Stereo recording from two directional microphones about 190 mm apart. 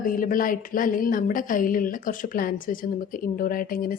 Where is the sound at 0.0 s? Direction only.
45° left (ahead or behind).